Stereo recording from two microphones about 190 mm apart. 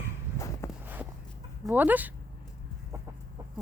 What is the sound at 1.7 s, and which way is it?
Speech, 10° right (ahead or behind).